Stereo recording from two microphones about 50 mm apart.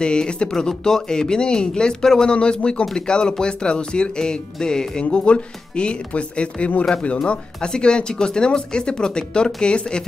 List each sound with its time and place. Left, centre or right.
0.0 s speech: centre